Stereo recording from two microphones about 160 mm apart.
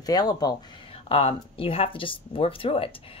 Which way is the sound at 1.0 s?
35° left (ahead or behind).